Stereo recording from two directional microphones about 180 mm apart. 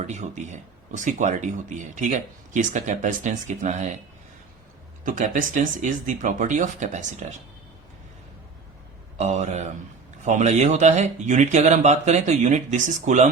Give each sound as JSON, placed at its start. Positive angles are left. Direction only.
{"t": 0.1, "sound": "speech", "side_deg": -40}
{"t": 5.0, "sound": "speech", "side_deg": -45}
{"t": 9.1, "sound": "speech", "side_deg": -40}